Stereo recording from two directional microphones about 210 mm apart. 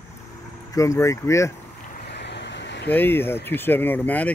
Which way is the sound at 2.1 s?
55° left (ahead or behind).